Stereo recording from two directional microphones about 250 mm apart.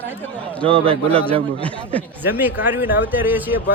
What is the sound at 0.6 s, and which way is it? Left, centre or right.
Speech, right.